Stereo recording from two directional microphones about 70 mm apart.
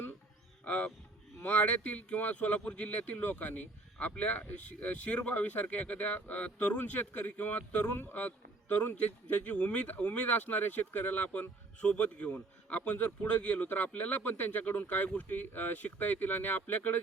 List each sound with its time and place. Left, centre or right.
0.6 s music: centre
1.4 s speech: left
9.3 s speech: left